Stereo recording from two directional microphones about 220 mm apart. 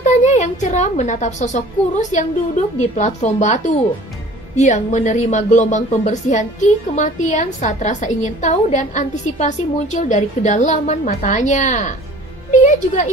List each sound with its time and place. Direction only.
0.0 s a woman's voice: 30° left (ahead or behind)